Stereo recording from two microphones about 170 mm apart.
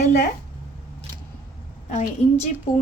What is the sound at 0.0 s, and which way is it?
Speech, 45° left (ahead or behind).